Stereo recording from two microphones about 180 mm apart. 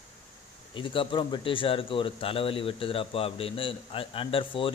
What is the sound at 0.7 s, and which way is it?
Speech, 30° left (ahead or behind).